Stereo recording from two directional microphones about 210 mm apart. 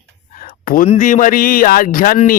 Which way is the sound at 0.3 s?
40° left (ahead or behind).